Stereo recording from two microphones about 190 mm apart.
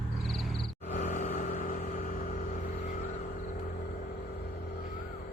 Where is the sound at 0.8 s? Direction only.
40° left (ahead or behind).